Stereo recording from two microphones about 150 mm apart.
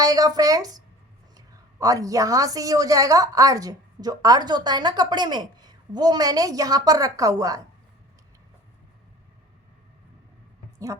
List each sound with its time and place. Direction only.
0.0 s a woman's voice: 25° right (ahead or behind)